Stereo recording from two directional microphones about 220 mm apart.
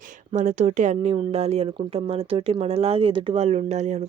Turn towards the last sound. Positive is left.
turn(degrees=-30)  # may be behind; listen again after turning